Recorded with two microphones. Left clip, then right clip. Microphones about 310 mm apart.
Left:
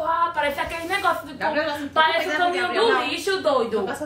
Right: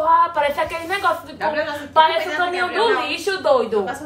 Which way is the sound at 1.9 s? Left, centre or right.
Centre.